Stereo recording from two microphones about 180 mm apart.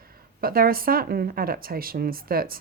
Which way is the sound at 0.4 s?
55° right (ahead or behind).